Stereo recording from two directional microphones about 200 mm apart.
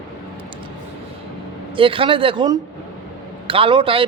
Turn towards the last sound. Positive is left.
turn(degrees=-25)  # may be behind; listen again after turning